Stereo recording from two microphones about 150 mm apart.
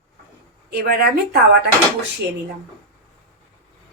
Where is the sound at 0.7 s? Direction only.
90° right.